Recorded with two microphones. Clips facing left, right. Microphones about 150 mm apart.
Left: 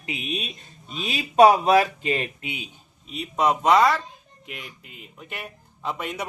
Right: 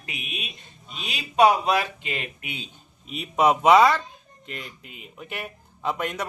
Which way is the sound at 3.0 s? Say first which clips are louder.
Right 2 dB; 5° right (ahead or behind).